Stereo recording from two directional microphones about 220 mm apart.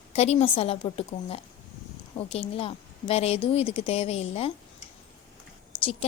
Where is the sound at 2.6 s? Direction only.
25° left (ahead or behind).